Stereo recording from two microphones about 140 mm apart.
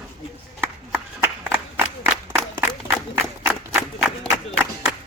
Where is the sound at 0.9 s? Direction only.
15° right (ahead or behind).